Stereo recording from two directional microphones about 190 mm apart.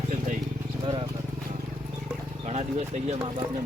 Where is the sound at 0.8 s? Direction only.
25° right (ahead or behind).